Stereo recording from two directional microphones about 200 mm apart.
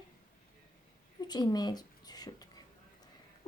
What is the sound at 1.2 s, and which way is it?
A woman's voice, 20° left (ahead or behind).